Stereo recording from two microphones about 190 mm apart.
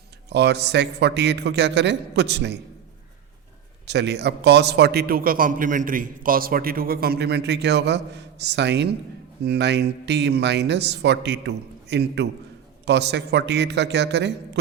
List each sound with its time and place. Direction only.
0.3 s a man's voice: 65° right (ahead or behind)
3.8 s a man's voice: 65° right (ahead or behind)